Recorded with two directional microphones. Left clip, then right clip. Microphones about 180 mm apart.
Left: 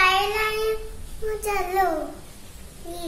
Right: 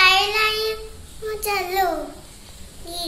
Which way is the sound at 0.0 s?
10° left (ahead or behind).